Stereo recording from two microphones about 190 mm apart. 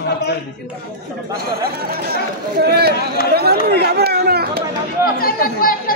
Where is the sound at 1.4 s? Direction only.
55° right (ahead or behind).